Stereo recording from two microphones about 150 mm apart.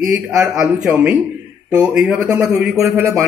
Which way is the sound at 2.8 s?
20° right (ahead or behind).